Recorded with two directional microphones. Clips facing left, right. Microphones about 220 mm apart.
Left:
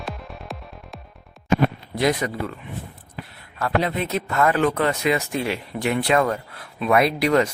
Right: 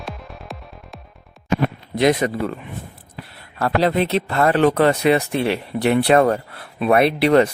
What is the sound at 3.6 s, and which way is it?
Speech, 35° right (ahead or behind).